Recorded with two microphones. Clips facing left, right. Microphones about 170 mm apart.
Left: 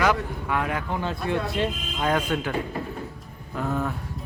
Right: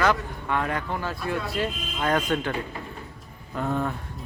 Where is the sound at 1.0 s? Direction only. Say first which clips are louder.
Left 3 dB; 20° left (ahead or behind).